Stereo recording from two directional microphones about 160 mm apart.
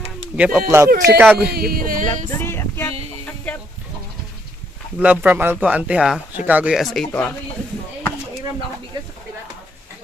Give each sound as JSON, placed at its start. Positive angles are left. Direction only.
{"t": 0.4, "sound": "speech", "side_deg": -10}
{"t": 1.5, "sound": "speech", "side_deg": -70}
{"t": 2.3, "sound": "music", "side_deg": 15}
{"t": 4.9, "sound": "speech", "side_deg": -10}
{"t": 7.1, "sound": "music", "side_deg": 10}